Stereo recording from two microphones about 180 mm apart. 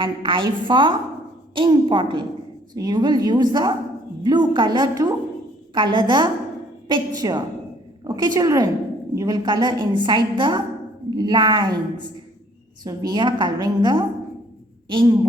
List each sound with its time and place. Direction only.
0.0 s a woman's voice: 25° right (ahead or behind)